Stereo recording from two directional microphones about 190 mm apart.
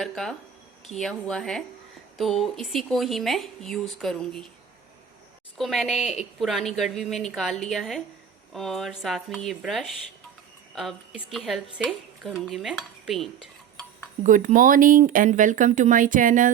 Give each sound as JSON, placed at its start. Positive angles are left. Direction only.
{"t": 0.0, "sound": "a woman's voice", "side_deg": 0}
{"t": 5.5, "sound": "a woman's voice", "side_deg": 0}
{"t": 14.3, "sound": "speech", "side_deg": -45}